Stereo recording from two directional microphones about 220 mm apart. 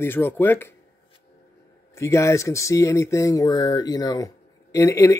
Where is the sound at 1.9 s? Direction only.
15° left (ahead or behind).